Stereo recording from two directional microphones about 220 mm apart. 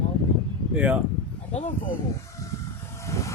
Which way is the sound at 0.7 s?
5° right (ahead or behind).